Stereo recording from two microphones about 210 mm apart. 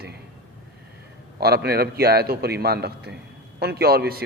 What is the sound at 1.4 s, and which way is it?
A man's voice, 50° right (ahead or behind).